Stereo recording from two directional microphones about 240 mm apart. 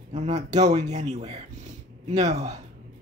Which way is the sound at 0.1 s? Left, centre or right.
Right.